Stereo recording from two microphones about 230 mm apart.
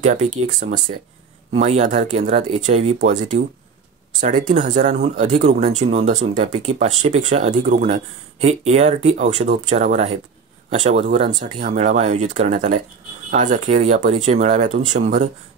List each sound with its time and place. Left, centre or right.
0.0 s speech: right
4.2 s speech: right